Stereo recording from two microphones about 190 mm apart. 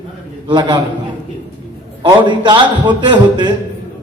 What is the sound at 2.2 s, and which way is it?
Speech, 25° right (ahead or behind).